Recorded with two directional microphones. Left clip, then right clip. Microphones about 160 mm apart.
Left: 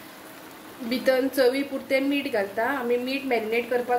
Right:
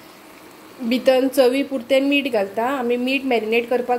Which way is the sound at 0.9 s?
50° right (ahead or behind).